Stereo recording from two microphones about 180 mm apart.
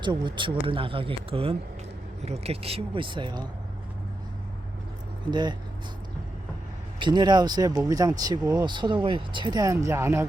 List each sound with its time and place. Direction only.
0.0 s speech: 25° right (ahead or behind)
5.3 s speech: 25° right (ahead or behind)
7.0 s speech: 25° right (ahead or behind)